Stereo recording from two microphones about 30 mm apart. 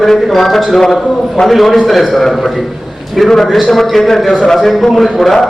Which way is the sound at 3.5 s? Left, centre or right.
Centre.